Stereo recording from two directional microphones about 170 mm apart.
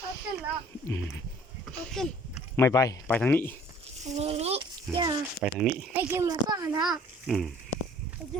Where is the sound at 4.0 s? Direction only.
40° right (ahead or behind).